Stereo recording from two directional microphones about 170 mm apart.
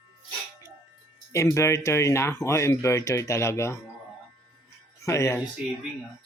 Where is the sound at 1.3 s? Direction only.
15° left (ahead or behind).